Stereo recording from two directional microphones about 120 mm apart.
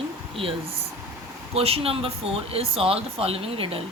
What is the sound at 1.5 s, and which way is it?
Speech, 55° right (ahead or behind).